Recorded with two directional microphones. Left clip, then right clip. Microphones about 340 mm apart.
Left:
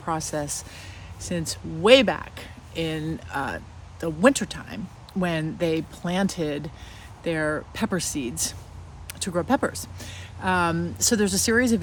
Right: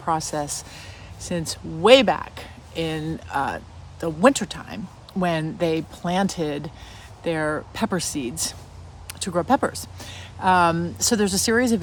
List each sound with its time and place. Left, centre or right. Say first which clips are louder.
0.0 s a woman's voice: right 4 dB; centre